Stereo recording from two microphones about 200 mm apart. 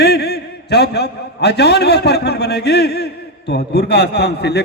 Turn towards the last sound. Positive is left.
turn(degrees=55)  # may be behind; listen again after turning